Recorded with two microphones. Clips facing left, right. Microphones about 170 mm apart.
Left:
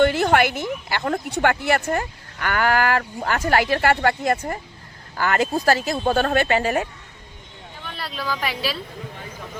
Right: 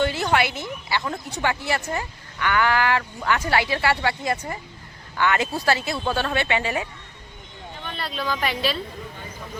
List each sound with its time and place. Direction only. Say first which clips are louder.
0.0 s a woman's voice: left 5 dB; 55° left (ahead or behind)
7.9 s speech: right 1 dB; 5° left (ahead or behind)